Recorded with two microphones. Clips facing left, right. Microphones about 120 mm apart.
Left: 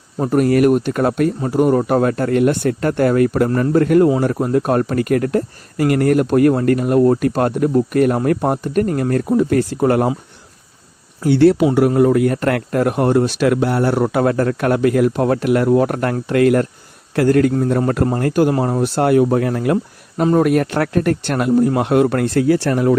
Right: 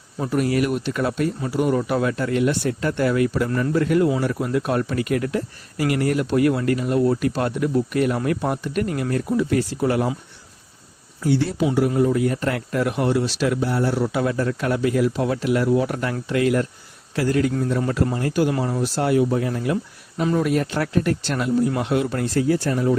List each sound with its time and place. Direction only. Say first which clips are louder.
0.2 s speech: left 7 dB; 45° left (ahead or behind)
11.2 s a man's voice: left 9 dB; 65° left (ahead or behind)